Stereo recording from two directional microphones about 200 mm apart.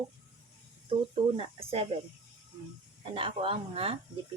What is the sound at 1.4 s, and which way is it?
Speech, 30° right (ahead or behind).